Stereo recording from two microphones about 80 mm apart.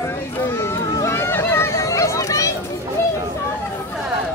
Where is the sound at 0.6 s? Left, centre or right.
Left.